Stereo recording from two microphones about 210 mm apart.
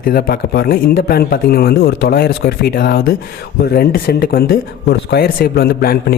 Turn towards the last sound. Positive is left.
turn(degrees=50)  # may be behind; listen again after turning